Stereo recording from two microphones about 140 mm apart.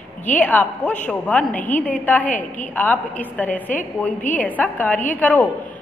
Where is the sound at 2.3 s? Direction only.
65° left (ahead or behind).